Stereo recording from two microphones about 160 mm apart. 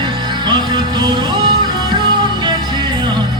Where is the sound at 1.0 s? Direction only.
25° right (ahead or behind).